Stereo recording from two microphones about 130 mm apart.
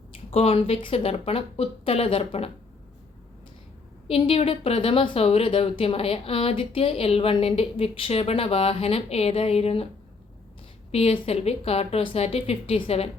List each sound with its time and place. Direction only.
0.1 s speech: 50° left (ahead or behind)
4.1 s speech: 50° left (ahead or behind)
10.9 s speech: 50° left (ahead or behind)